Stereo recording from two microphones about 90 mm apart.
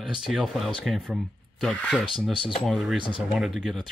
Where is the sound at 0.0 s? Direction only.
5° right (ahead or behind).